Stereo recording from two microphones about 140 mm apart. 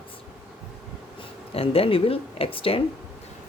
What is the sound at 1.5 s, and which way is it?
Speech, 45° left (ahead or behind).